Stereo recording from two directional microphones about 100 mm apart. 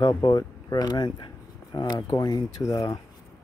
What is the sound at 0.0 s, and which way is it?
Speech, 45° left (ahead or behind).